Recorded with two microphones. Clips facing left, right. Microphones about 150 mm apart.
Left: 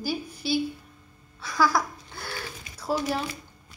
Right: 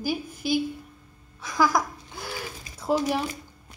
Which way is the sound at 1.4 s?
20° right (ahead or behind).